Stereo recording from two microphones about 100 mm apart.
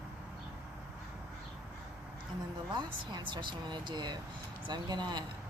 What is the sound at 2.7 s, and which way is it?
Speech, 50° right (ahead or behind).